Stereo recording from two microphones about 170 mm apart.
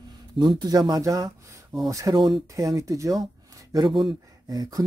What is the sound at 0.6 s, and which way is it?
Speech, 25° right (ahead or behind).